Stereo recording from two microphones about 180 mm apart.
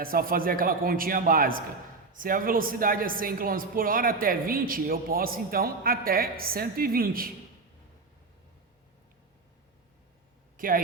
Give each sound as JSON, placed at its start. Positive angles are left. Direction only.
{"t": 0.0, "sound": "speech", "side_deg": -55}
{"t": 10.6, "sound": "speech", "side_deg": -50}